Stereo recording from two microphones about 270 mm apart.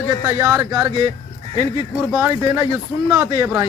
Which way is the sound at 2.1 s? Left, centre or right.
Centre.